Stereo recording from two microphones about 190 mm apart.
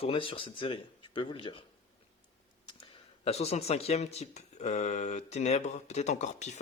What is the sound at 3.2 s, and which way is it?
Speech, 35° left (ahead or behind).